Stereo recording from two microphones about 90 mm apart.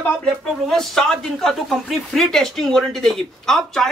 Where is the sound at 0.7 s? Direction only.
5° left (ahead or behind).